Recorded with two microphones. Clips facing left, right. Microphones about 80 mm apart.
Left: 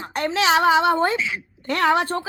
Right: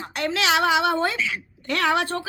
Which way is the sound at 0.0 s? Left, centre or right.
Left.